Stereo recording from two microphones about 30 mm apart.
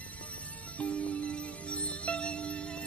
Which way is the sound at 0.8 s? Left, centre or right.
Left.